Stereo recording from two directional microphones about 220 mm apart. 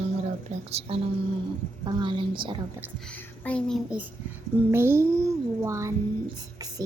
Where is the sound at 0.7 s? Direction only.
30° right (ahead or behind).